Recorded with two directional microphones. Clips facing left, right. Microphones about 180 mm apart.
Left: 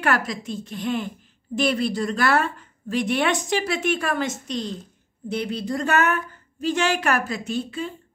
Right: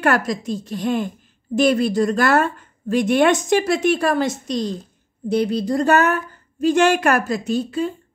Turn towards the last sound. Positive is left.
turn(degrees=-40)  # may be behind; listen again after turning